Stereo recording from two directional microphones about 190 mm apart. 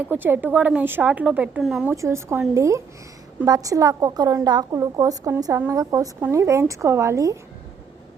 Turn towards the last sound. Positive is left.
turn(degrees=-15)  # may be behind; listen again after turning